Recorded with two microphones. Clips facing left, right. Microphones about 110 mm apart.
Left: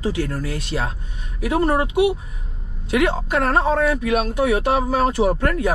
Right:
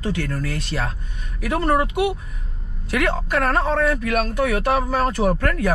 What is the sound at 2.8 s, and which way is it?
Speech, 30° left (ahead or behind).